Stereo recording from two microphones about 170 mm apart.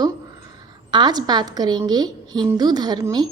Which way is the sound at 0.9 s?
25° right (ahead or behind).